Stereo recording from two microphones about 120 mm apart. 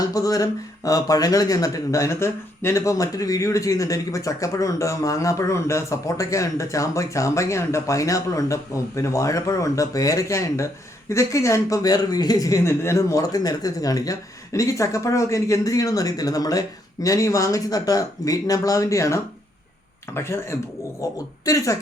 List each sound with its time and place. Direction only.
0.0 s speech: 30° left (ahead or behind)